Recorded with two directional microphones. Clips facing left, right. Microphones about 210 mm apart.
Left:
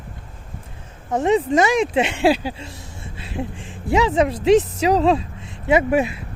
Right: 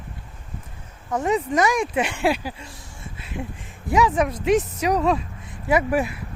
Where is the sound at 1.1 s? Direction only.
25° left (ahead or behind).